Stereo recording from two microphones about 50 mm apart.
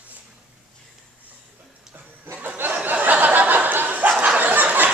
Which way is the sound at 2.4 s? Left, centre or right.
Right.